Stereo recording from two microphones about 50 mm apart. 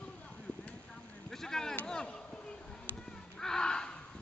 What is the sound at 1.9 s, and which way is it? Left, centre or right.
Chop, centre.